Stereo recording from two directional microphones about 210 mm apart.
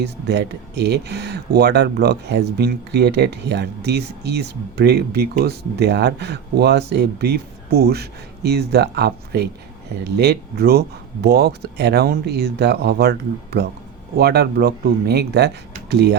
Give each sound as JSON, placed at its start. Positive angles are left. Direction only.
{"t": 0.0, "sound": "speech", "side_deg": -50}